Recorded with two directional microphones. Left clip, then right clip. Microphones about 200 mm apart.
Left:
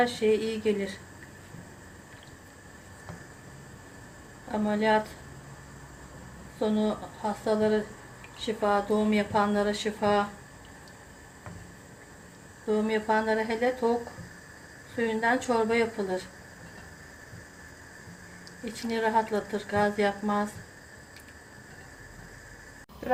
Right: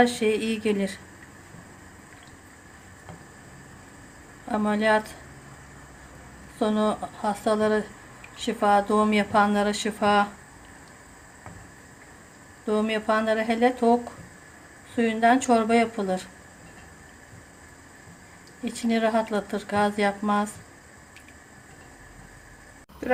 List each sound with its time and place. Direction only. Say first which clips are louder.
0.0 s speech: right 3 dB; 55° right (ahead or behind)
4.5 s speech: right 3 dB; 55° right (ahead or behind)
6.6 s speech: right 4 dB; 55° right (ahead or behind)
12.6 s speech: right 2 dB; 55° right (ahead or behind)
14.9 s speech: right 6 dB; 55° right (ahead or behind)
18.6 s speech: right 4 dB; 55° right (ahead or behind)